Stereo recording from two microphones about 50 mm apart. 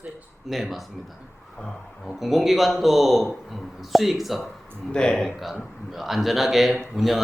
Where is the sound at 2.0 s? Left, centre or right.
Centre.